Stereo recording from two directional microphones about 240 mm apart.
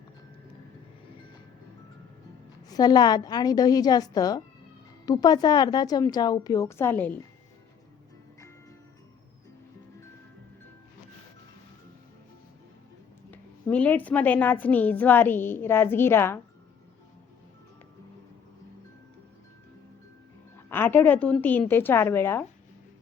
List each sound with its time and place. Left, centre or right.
2.6 s a woman's voice: centre
13.3 s a woman's voice: centre
20.7 s a woman's voice: centre